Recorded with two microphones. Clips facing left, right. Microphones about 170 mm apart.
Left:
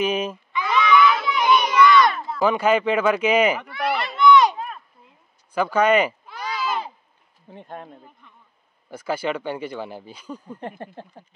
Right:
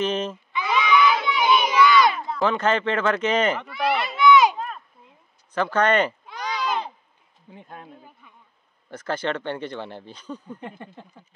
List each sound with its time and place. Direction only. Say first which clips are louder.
0.0 s speech: left 2 dB; 10° left (ahead or behind)
0.6 s crowd: left 2 dB; centre (ahead or behind)
5.5 s a sound: left 2 dB; 10° left (ahead or behind)
7.5 s speech: left 5 dB; 35° left (ahead or behind)
8.2 s a sound: even; 5° right (ahead or behind)
8.9 s speech: left 1 dB; 10° left (ahead or behind)
10.8 s speech: left 4 dB; 35° left (ahead or behind)